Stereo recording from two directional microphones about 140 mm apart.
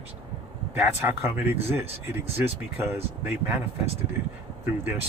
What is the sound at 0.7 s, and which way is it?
Speech, 15° right (ahead or behind).